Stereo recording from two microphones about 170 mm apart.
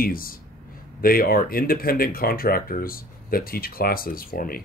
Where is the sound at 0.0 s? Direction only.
60° left (ahead or behind).